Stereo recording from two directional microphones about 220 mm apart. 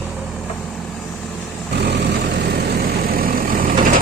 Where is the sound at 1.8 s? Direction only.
50° right (ahead or behind).